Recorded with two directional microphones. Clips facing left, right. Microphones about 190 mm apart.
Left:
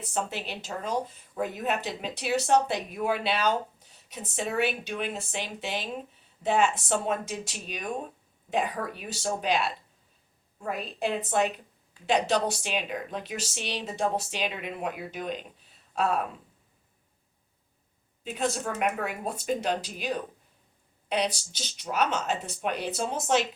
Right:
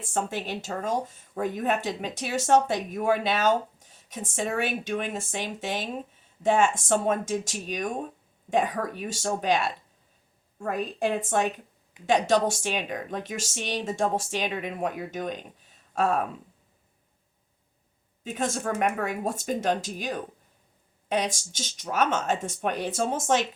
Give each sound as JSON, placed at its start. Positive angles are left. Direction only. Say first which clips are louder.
{"t": 0.0, "sound": "speech", "louder": "right 2 dB", "side_deg": -45}
{"t": 18.2, "sound": "a woman's voice", "louder": "even", "side_deg": -45}